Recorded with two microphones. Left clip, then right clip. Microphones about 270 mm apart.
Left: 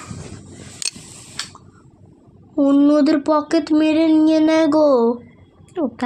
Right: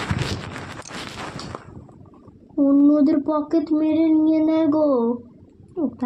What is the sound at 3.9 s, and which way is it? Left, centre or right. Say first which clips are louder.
Speech: left 1 dB; left.